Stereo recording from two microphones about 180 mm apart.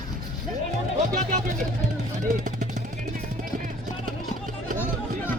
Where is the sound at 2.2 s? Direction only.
45° right (ahead or behind).